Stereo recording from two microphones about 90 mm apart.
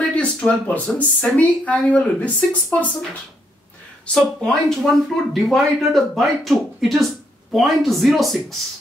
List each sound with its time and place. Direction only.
0.1 s speech: 15° left (ahead or behind)
4.2 s speech: 5° left (ahead or behind)